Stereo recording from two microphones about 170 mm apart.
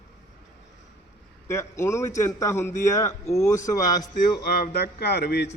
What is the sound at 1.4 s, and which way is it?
A man's voice, 15° left (ahead or behind).